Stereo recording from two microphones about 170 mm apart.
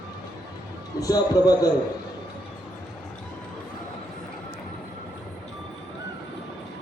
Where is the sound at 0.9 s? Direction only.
20° left (ahead or behind).